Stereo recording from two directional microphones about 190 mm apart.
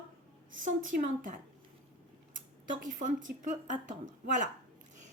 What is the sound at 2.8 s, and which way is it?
Speech, 45° right (ahead or behind).